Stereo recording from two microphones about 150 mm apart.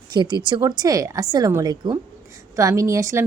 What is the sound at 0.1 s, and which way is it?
Speech, 30° right (ahead or behind).